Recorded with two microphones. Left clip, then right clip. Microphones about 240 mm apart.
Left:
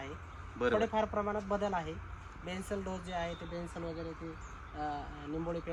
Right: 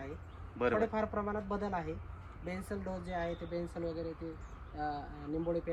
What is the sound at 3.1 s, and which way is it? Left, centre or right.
Speech, centre.